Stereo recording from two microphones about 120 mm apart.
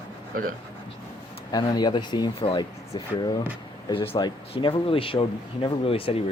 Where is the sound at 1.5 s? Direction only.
35° left (ahead or behind).